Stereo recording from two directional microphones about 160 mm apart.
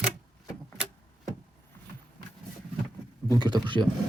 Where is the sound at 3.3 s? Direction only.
25° right (ahead or behind).